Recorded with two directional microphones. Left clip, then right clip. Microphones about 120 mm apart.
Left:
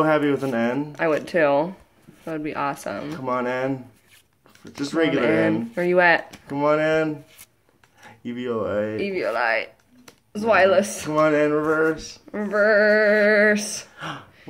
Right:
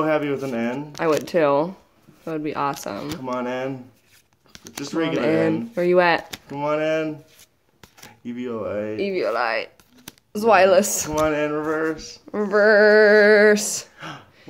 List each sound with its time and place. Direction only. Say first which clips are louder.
0.0 s speech: left 2 dB; 20° left (ahead or behind)
0.6 s a sound: left 3 dB; 15° left (ahead or behind)
0.9 s speech: right 3 dB; 25° right (ahead or behind)
1.2 s speech: even; 40° right (ahead or behind)
3.2 s a sound: left 4 dB; 15° left (ahead or behind)
4.8 s speech: left 3 dB; 20° left (ahead or behind)
5.2 s speech: even; 45° right (ahead or behind)
6.4 s a sound: left 3 dB; 15° left (ahead or behind)
8.3 s speech: left 2 dB; 25° left (ahead or behind)
8.9 s speech: right 1 dB; 35° right (ahead or behind)
10.3 s speech: right 2 dB; 55° right (ahead or behind); by 11.1 s 85° right
11.1 s a sound: left 3 dB; 15° left (ahead or behind)
12.4 s female singing: right 3 dB; 90° right; by 13.8 s 70° right (ahead or behind)
13.9 s speech: left 3 dB; 15° left (ahead or behind)